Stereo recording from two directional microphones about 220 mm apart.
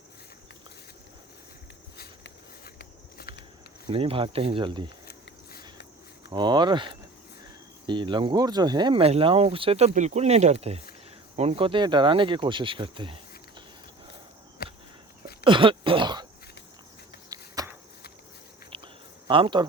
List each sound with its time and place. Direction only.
2.0 s walk: 50° left (ahead or behind)
3.8 s speech: 25° right (ahead or behind)
5.0 s a sound: 45° left (ahead or behind)
6.3 s speech: 20° right (ahead or behind)
14.6 s a sound: 45° left (ahead or behind)
15.4 s throat clearing: 20° right (ahead or behind)
17.2 s a sound: 15° right (ahead or behind)
18.7 s cricket: 25° right (ahead or behind)
19.3 s speech: 20° right (ahead or behind)